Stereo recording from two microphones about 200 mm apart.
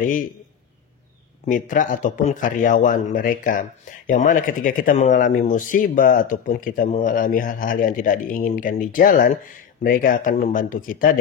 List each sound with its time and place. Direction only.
1.4 s speech: 40° left (ahead or behind)